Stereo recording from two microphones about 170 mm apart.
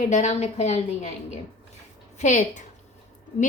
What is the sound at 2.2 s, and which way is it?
Speech, 45° left (ahead or behind).